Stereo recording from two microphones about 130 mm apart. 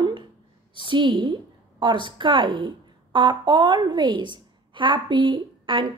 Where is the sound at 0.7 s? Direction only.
40° right (ahead or behind).